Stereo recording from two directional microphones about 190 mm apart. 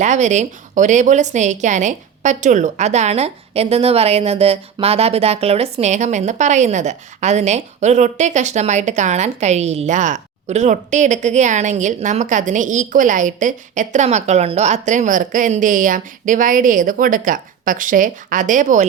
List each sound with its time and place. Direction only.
0.0 s a woman's voice: 40° right (ahead or behind)